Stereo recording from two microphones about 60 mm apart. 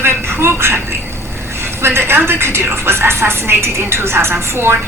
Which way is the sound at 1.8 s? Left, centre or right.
Right.